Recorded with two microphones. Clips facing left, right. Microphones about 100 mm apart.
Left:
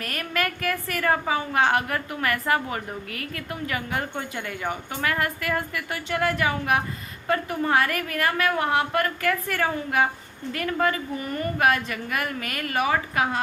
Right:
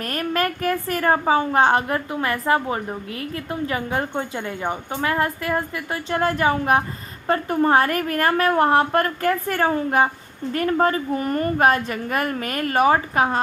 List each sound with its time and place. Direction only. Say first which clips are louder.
0.0 s a woman's voice: right 5 dB; 35° right (ahead or behind)